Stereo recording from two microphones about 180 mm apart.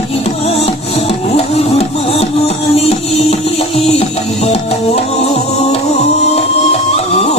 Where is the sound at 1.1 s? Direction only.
35° left (ahead or behind).